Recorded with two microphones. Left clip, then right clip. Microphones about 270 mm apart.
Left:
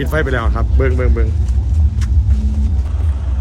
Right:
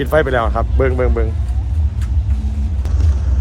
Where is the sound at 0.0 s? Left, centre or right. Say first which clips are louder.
Right 4 dB; centre.